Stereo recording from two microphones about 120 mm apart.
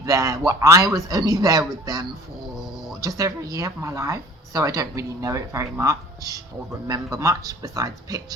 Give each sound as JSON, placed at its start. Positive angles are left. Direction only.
{"t": 0.0, "sound": "speech", "side_deg": -30}
{"t": 2.6, "sound": "a sound", "side_deg": 0}
{"t": 3.0, "sound": "speech", "side_deg": -30}